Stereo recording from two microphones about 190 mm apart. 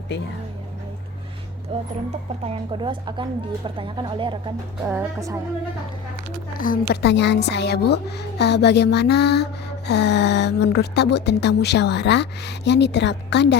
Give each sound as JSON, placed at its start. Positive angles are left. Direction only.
{"t": 1.7, "sound": "a woman's voice", "side_deg": -35}
{"t": 4.9, "sound": "speech", "side_deg": -15}
{"t": 6.6, "sound": "mantra", "side_deg": 50}